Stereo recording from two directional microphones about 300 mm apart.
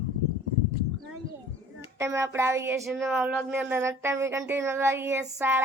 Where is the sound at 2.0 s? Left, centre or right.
Centre.